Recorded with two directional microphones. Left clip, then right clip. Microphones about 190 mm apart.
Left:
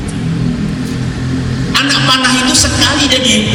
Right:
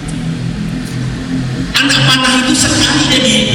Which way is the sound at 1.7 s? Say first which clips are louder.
Even; 10° left (ahead or behind).